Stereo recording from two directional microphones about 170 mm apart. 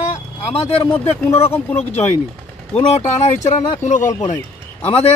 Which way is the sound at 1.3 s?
15° left (ahead or behind).